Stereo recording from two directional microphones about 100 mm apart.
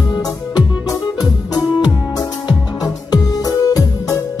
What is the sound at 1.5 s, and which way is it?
Music, 45° left (ahead or behind).